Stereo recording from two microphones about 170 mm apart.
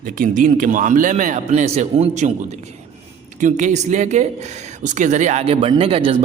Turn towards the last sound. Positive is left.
turn(degrees=-35)  # may be behind; listen again after turning